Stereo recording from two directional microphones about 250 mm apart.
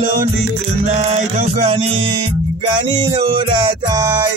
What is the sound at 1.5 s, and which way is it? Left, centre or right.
Music, right.